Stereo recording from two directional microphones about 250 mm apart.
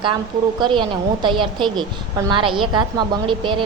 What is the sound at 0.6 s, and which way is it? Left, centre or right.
A woman's voice, centre.